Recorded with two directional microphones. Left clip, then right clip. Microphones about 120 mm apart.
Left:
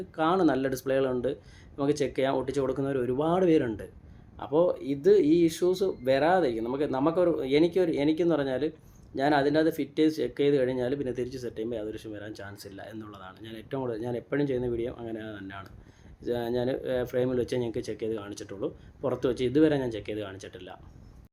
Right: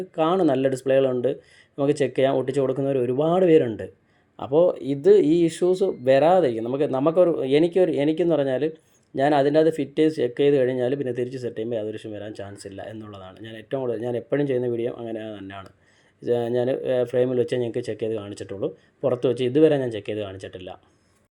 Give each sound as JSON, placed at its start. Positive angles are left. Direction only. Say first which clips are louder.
{"t": 0.2, "sound": "speech", "louder": "right 5 dB", "side_deg": -20}